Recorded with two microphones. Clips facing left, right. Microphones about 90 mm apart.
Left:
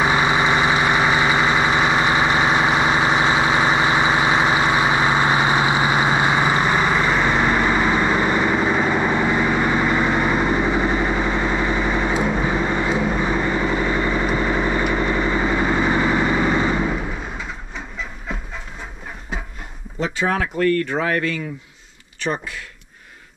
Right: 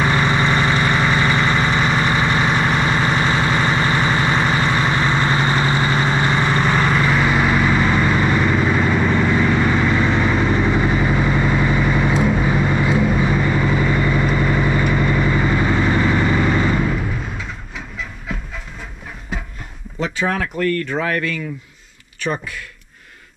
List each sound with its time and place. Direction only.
0.0 s vehicle: 10° left (ahead or behind)
17.7 s train: centre (ahead or behind)
20.0 s speech: 25° left (ahead or behind)